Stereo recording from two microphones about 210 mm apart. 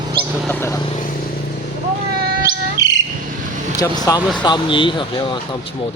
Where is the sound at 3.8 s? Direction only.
20° left (ahead or behind).